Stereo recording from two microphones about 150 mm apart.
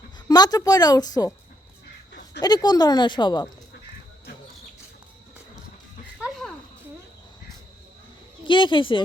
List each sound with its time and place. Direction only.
0.3 s a woman's voice: 25° left (ahead or behind)
2.4 s a woman's voice: 25° left (ahead or behind)
6.1 s a sound: centre (ahead or behind)
8.4 s a woman's voice: 35° left (ahead or behind)